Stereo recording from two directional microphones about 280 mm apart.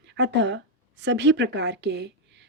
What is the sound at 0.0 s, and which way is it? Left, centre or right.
Speech, right.